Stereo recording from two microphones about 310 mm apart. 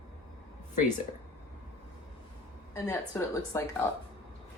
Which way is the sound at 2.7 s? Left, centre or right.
Centre.